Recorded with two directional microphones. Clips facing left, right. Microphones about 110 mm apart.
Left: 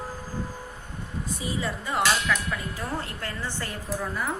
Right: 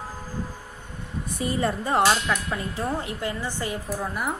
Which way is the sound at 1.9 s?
30° right (ahead or behind).